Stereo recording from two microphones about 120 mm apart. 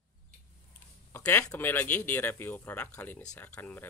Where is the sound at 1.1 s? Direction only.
20° left (ahead or behind).